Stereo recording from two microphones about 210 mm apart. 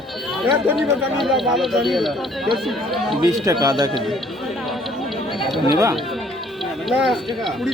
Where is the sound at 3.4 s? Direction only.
20° right (ahead or behind).